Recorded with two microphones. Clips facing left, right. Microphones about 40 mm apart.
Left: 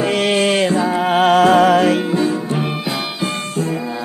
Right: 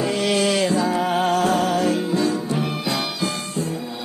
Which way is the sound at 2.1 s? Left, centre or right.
Left.